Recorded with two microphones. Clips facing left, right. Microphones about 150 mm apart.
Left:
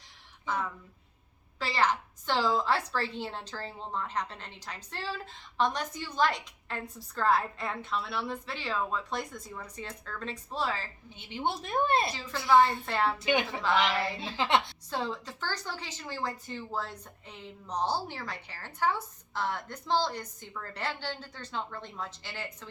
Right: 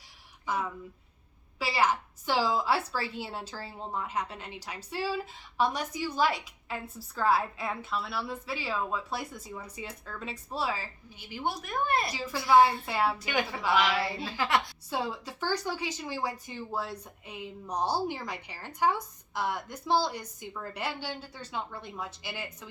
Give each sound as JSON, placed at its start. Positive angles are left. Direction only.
{"t": 0.4, "sound": "a woman's voice", "side_deg": -10}
{"t": 11.2, "sound": "a woman's voice", "side_deg": 25}
{"t": 12.1, "sound": "a woman's voice", "side_deg": -10}
{"t": 13.1, "sound": "a woman's voice", "side_deg": 20}
{"t": 13.7, "sound": "a woman's voice", "side_deg": -10}
{"t": 14.0, "sound": "a woman's voice", "side_deg": 20}
{"t": 14.8, "sound": "a woman's voice", "side_deg": -10}